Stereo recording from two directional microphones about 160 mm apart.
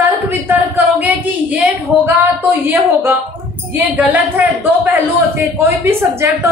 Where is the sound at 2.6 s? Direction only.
10° right (ahead or behind).